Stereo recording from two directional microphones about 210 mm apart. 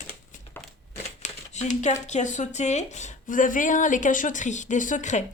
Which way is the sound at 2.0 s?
35° left (ahead or behind).